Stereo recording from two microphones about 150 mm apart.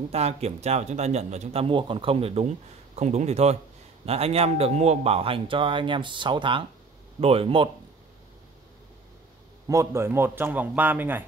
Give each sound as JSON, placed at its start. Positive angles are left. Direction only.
{"t": 0.1, "sound": "a man's voice", "side_deg": -45}
{"t": 9.7, "sound": "a man's voice", "side_deg": -20}